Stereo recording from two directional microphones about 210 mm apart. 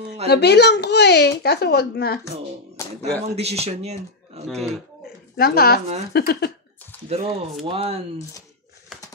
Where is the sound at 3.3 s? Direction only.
30° right (ahead or behind).